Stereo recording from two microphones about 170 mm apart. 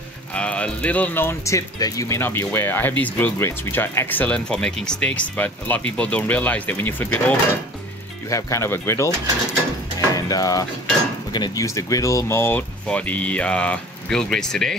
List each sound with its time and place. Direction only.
0.3 s speech: 10° left (ahead or behind)
9.9 s a sound: 20° left (ahead or behind)
11.3 s speech: 20° left (ahead or behind); by 14.8 s 5° left (ahead or behind)